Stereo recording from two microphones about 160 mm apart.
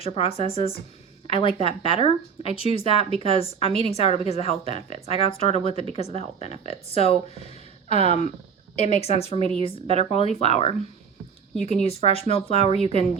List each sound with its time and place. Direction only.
0.0 s speech: 35° left (ahead or behind)
9.4 s a woman's voice: 35° right (ahead or behind)
10.0 s speech: 40° left (ahead or behind)